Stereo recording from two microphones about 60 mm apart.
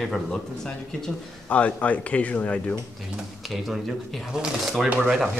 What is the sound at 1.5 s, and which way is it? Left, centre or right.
A man's voice, left.